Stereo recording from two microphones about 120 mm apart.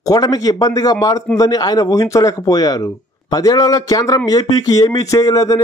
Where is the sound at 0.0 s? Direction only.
30° left (ahead or behind).